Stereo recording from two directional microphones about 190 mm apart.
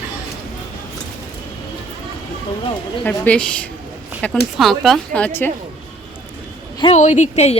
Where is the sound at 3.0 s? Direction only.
10° left (ahead or behind).